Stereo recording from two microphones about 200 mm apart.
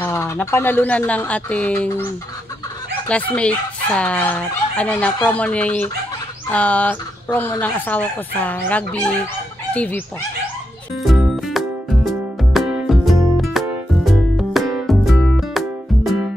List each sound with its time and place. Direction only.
0.0 s fowl: 15° left (ahead or behind)
3.1 s fowl: 5° left (ahead or behind)
11.0 s music: centre (ahead or behind)